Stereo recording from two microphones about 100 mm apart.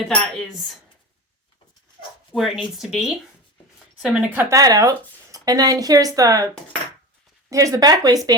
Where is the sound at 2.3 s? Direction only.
Centre (ahead or behind).